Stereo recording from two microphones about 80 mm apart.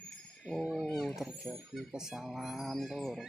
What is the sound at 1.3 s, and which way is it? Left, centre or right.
Speech, right.